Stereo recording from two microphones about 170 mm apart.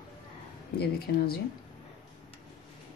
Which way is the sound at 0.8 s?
65° left (ahead or behind).